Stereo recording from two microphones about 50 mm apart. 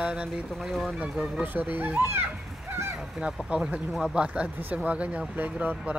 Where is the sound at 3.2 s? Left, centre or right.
Centre.